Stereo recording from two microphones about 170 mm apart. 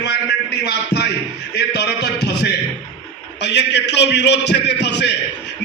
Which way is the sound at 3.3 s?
85° left.